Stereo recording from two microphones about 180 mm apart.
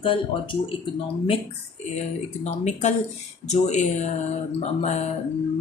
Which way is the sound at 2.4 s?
40° left (ahead or behind).